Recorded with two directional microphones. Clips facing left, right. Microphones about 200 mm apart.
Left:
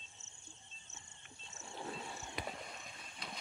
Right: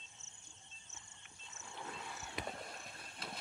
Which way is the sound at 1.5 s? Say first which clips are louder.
Left 4 dB; 25° left (ahead or behind).